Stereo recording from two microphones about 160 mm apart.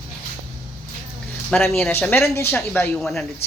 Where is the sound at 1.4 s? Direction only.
Centre (ahead or behind).